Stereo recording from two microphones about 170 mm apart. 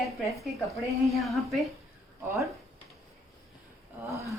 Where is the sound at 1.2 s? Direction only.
Centre (ahead or behind).